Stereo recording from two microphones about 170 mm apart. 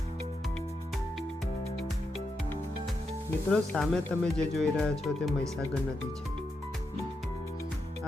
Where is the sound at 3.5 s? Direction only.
5° left (ahead or behind).